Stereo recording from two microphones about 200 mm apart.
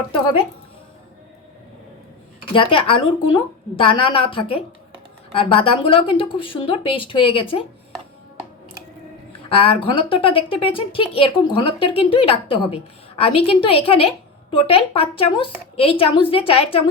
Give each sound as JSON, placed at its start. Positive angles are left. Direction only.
{"t": 2.4, "sound": "a woman's voice", "side_deg": 25}
{"t": 9.5, "sound": "a woman's voice", "side_deg": 25}